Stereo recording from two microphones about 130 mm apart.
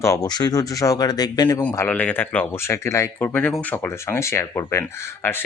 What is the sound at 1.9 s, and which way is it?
Speech, 10° left (ahead or behind).